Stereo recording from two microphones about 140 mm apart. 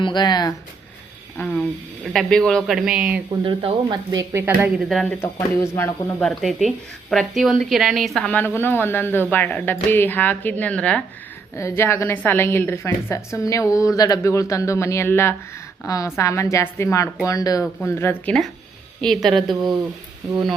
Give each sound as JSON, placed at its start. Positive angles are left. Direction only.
{"t": 0.0, "sound": "speech", "side_deg": 30}
{"t": 1.4, "sound": "speech", "side_deg": 15}
{"t": 2.1, "sound": "a woman's voice", "side_deg": 5}
{"t": 3.4, "sound": "speech", "side_deg": -35}
{"t": 4.8, "sound": "a woman's voice", "side_deg": 0}
{"t": 5.0, "sound": "speech", "side_deg": 15}
{"t": 6.1, "sound": "a woman's voice", "side_deg": 0}
{"t": 11.5, "sound": "a woman's voice", "side_deg": 20}
{"t": 19.5, "sound": "speech", "side_deg": -30}